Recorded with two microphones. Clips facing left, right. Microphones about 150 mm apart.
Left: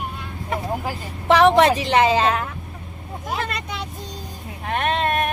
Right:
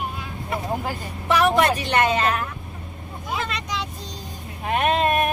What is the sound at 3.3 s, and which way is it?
Vehicle, 55° left (ahead or behind).